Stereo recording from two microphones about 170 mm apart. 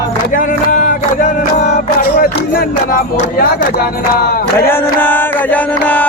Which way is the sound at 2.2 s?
55° left (ahead or behind).